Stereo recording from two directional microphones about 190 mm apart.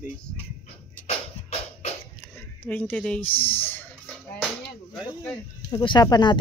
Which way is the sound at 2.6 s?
10° left (ahead or behind).